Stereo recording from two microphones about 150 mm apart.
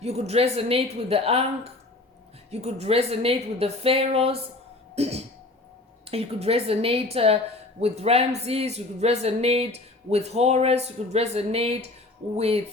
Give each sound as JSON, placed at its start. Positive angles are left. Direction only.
{"t": 0.0, "sound": "a woman's voice", "side_deg": -45}